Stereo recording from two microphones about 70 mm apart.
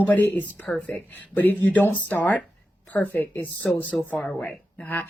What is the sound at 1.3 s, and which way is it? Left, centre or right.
Speech, left.